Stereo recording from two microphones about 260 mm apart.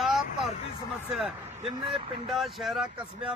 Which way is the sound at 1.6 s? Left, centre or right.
Right.